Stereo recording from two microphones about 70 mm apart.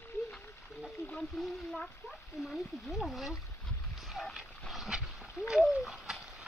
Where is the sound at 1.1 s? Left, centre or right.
Centre.